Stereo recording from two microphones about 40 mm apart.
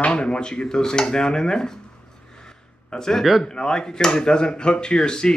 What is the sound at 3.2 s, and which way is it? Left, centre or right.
Speech, centre.